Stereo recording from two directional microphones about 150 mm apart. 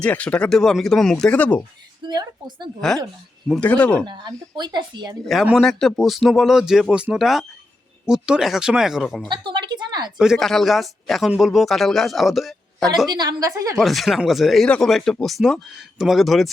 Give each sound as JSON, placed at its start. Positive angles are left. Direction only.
{"t": 0.0, "sound": "speech", "side_deg": 10}
{"t": 2.0, "sound": "speech", "side_deg": -25}
{"t": 3.5, "sound": "speech", "side_deg": 10}
{"t": 4.0, "sound": "speech", "side_deg": -30}
{"t": 5.2, "sound": "a man's voice", "side_deg": 0}
{"t": 9.3, "sound": "a sound", "side_deg": -30}
{"t": 10.2, "sound": "a man's voice", "side_deg": 0}
{"t": 13.1, "sound": "speech", "side_deg": -25}
{"t": 13.7, "sound": "a man's voice", "side_deg": 0}